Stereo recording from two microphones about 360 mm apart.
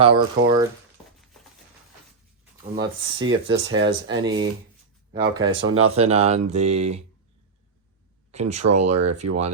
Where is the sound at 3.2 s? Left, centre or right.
Right.